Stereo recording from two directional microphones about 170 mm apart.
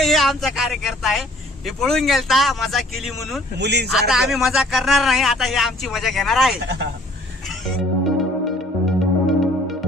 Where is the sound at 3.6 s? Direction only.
80° right.